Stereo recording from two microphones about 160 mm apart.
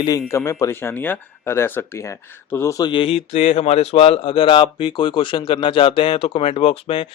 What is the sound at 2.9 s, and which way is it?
Speech, 35° left (ahead or behind).